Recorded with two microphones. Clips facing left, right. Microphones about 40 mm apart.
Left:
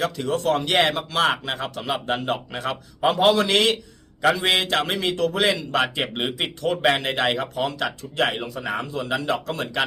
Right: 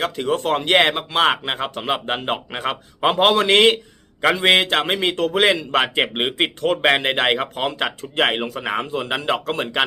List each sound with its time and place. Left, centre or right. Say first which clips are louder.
0.0 s a man's voice: right 2 dB; right